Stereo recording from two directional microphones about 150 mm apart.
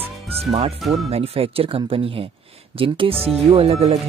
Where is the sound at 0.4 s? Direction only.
40° right (ahead or behind).